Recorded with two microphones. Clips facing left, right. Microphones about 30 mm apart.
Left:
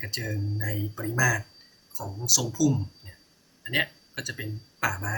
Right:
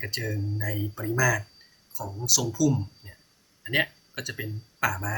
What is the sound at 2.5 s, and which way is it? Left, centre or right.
Speech, centre.